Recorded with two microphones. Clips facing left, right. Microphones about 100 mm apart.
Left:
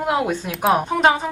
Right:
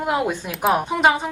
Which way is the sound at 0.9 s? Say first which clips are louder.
Even; 5° right (ahead or behind).